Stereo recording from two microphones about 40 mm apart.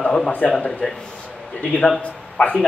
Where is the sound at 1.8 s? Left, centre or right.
Left.